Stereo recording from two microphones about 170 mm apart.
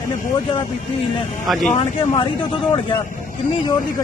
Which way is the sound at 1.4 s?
Centre (ahead or behind).